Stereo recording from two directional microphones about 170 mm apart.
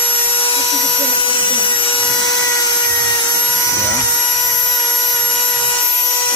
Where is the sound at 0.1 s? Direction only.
30° left (ahead or behind).